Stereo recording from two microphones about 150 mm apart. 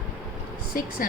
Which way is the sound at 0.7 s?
70° left (ahead or behind).